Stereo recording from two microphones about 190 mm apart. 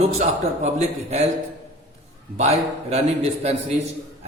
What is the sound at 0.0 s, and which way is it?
A man's voice, 35° right (ahead or behind).